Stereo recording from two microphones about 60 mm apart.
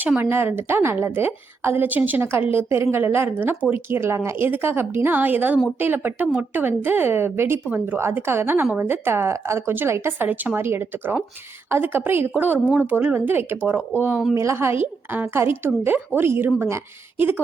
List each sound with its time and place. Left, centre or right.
0.2 s speech: right
2.2 s speech: right
2.6 s speech: right
4.4 s speech: right
14.3 s speech: right